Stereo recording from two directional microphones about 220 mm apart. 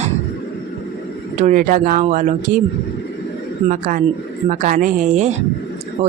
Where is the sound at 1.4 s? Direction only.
35° right (ahead or behind).